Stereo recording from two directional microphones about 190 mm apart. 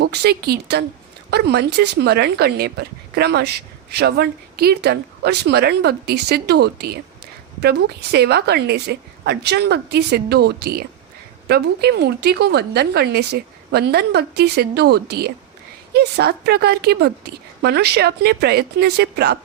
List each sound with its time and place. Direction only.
0.0 s speech: 60° right (ahead or behind)